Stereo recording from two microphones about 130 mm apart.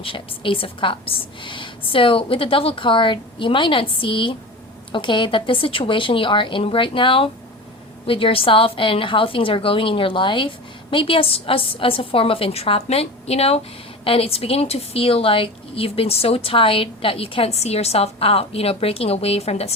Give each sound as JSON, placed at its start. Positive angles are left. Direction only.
{"t": 0.0, "sound": "a woman's voice", "side_deg": 45}